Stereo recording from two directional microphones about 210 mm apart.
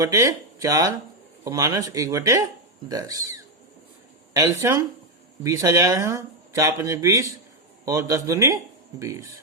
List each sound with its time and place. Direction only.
0.0 s speech: 15° right (ahead or behind)